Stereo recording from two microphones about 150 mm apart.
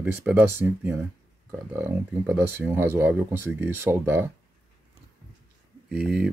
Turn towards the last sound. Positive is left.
turn(degrees=-5)  # may be behind; listen again after turning